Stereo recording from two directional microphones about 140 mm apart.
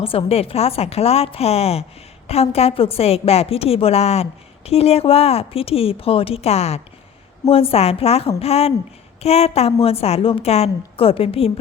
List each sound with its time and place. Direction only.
0.0 s a woman's voice: 40° left (ahead or behind)